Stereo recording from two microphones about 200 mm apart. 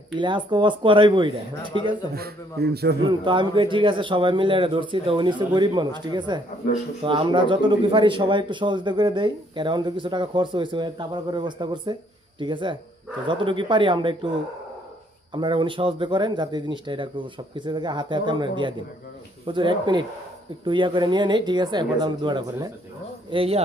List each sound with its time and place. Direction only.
0.2 s speech: 25° right (ahead or behind)
2.1 s a man's voice: 50° right (ahead or behind)
3.1 s speech: 25° right (ahead or behind)
15.3 s speech: 25° right (ahead or behind)